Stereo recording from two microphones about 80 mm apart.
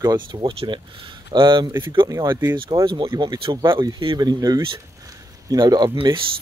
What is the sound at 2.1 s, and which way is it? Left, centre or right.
Speech, right.